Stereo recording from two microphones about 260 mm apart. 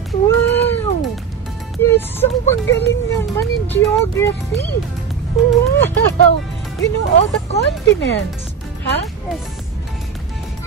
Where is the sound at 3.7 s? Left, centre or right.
Centre.